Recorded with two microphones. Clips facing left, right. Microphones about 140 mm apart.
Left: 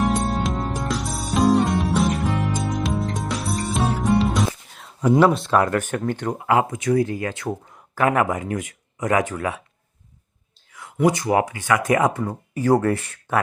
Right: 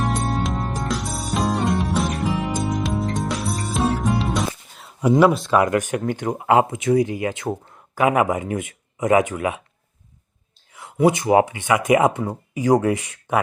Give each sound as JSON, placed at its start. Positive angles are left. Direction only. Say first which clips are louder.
{"t": 0.0, "sound": "music", "louder": "left 2 dB", "side_deg": 0}
{"t": 5.2, "sound": "speech", "louder": "right 2 dB", "side_deg": 0}
{"t": 5.6, "sound": "speech", "louder": "right 2 dB", "side_deg": -15}
{"t": 6.4, "sound": "speech", "louder": "right 3 dB", "side_deg": -25}
{"t": 10.7, "sound": "speech", "louder": "right 2 dB", "side_deg": -20}